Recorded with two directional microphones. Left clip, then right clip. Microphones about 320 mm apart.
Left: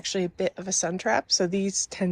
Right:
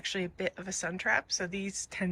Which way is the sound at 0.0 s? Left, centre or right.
Centre.